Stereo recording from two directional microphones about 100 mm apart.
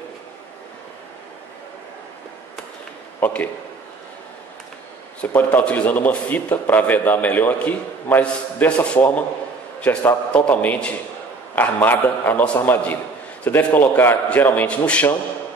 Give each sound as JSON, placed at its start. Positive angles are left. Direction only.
{"t": 5.2, "sound": "a man's voice", "side_deg": 15}